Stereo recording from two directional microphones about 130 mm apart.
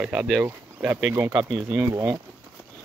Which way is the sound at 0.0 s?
5° right (ahead or behind).